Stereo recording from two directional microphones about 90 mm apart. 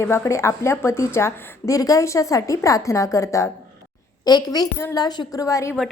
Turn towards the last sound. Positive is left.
turn(degrees=35)  # may be behind; listen again after turning